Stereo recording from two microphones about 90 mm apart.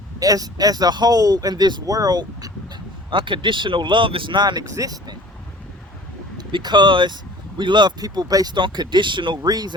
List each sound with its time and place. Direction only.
0.2 s speech: 45° right (ahead or behind)
3.1 s speech: 65° right (ahead or behind); by 5.1 s 40° right (ahead or behind)
6.3 s speech: 50° right (ahead or behind)
8.5 s speech: 60° right (ahead or behind)